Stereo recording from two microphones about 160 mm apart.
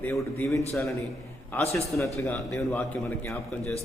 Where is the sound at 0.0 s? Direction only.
10° left (ahead or behind).